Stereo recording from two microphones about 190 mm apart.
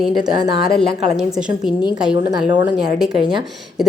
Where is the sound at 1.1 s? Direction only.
5° right (ahead or behind).